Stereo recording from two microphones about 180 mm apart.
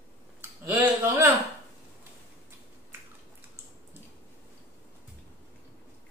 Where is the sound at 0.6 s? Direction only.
15° right (ahead or behind).